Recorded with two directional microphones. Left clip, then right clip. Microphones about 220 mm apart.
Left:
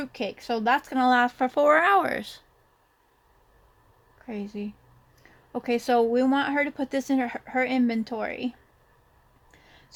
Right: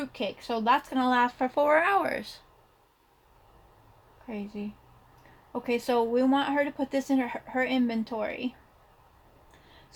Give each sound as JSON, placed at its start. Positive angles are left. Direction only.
{"t": 0.0, "sound": "speech", "side_deg": 45}
{"t": 4.3, "sound": "speech", "side_deg": 45}